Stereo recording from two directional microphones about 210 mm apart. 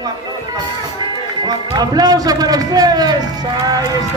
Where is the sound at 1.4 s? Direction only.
20° right (ahead or behind).